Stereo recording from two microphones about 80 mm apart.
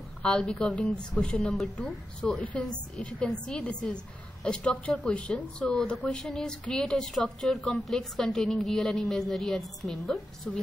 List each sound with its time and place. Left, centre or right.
0.2 s a woman's voice: centre